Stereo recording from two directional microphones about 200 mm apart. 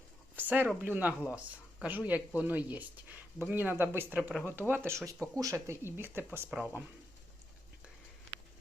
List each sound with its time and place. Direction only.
0.3 s speech: 10° right (ahead or behind)